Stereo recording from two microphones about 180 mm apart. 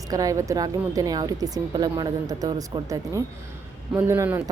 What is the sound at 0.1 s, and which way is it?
A woman's voice, 20° right (ahead or behind).